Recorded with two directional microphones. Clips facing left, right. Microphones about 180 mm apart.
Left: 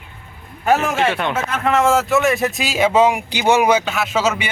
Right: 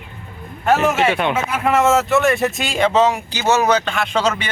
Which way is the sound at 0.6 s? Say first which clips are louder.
Right 1 dB; centre (ahead or behind).